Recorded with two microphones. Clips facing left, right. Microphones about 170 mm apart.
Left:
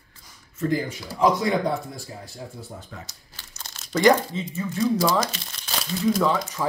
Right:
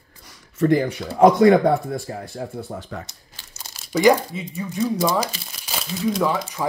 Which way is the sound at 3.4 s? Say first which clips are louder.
Even; 10° right (ahead or behind).